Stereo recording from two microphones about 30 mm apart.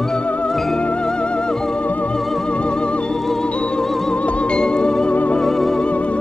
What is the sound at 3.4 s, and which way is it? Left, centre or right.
Music, left.